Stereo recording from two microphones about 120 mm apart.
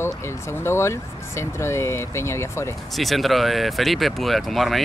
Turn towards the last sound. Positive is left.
turn(degrees=0)  # may be behind; listen again after turning